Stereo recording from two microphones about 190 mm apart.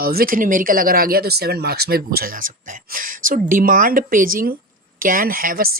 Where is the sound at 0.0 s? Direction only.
50° right (ahead or behind).